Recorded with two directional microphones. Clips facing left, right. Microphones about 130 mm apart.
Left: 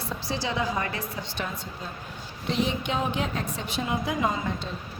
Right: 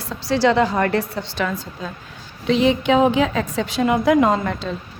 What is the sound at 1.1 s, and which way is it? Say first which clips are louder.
Speech: right 9 dB; 85° right.